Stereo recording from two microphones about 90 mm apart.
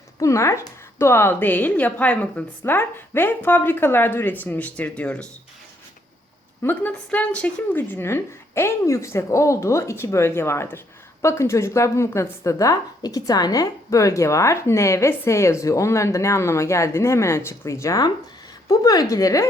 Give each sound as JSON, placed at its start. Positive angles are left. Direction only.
{"t": 0.2, "sound": "a woman's voice", "side_deg": 35}
{"t": 6.6, "sound": "a woman's voice", "side_deg": 20}